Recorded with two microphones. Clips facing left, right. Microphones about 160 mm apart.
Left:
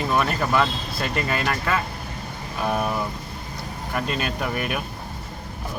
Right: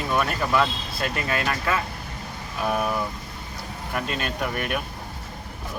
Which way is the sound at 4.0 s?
Centre (ahead or behind).